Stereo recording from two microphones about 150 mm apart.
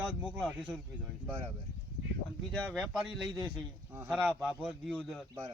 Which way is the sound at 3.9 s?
15° right (ahead or behind).